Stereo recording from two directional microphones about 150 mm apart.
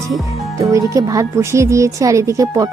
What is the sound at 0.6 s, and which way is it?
Speech, 20° right (ahead or behind).